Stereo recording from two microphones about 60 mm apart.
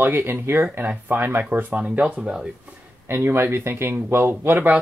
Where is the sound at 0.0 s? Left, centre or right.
Right.